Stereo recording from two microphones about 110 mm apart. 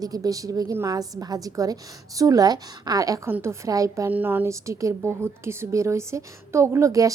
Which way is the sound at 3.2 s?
25° right (ahead or behind).